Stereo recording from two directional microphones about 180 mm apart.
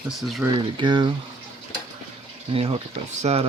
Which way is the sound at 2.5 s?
30° right (ahead or behind).